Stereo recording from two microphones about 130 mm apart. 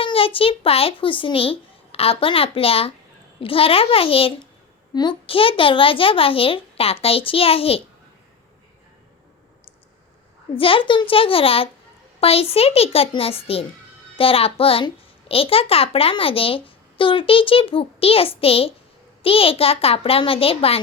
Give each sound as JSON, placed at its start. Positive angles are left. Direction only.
{"t": 0.0, "sound": "a child's voice", "side_deg": 45}
{"t": 10.5, "sound": "a child's voice", "side_deg": 45}